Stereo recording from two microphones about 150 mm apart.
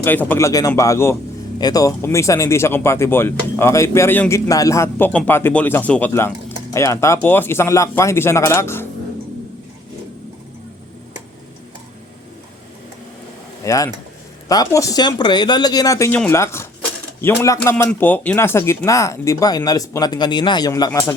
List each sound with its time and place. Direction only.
0.0 s speech: 10° left (ahead or behind)
13.7 s speech: 25° left (ahead or behind)